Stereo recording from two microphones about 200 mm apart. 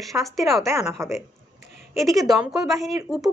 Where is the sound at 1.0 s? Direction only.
15° right (ahead or behind).